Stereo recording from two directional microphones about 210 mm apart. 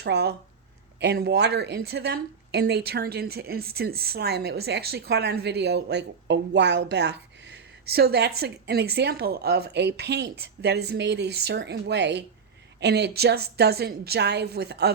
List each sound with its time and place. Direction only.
0.0 s speech: 55° right (ahead or behind)